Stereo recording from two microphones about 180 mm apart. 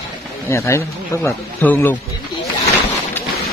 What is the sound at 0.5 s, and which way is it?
Speech, 15° left (ahead or behind).